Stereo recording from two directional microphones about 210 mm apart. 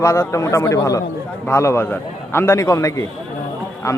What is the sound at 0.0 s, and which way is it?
A man's voice, 15° left (ahead or behind).